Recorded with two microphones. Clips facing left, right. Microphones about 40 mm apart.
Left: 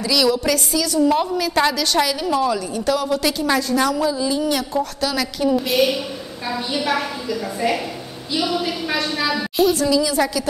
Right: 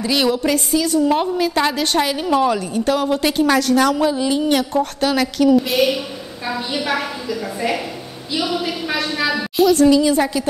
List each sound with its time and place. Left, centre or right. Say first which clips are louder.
0.0 s a woman's voice: right 1 dB; right
1.7 s a woman's voice: right 1 dB; right
3.5 s a woman's voice: right 3 dB; right
5.6 s a woman's voice: right 1 dB; centre
9.8 s a woman's voice: right 5 dB; right